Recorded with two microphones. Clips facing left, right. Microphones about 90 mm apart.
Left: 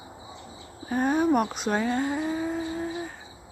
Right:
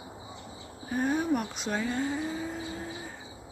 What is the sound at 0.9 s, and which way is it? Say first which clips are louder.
Speech: left 5 dB; 55° left (ahead or behind).